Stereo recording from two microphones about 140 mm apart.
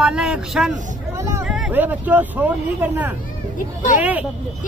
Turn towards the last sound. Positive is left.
turn(degrees=-10)  # may be behind; listen again after turning